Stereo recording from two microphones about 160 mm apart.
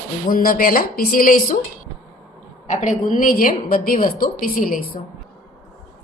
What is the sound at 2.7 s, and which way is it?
Speech, 50° left (ahead or behind).